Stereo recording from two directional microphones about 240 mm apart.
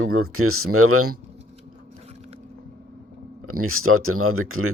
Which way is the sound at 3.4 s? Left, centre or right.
Right.